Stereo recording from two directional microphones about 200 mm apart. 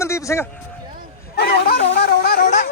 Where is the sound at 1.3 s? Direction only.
50° left (ahead or behind).